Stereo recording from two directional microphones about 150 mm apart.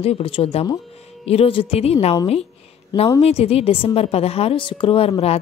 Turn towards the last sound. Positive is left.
turn(degrees=40)  # may be behind; listen again after turning